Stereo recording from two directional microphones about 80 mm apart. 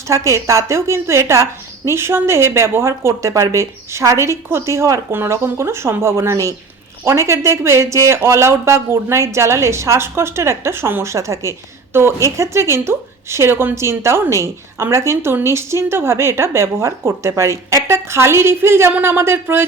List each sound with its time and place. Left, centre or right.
0.1 s a woman's voice: right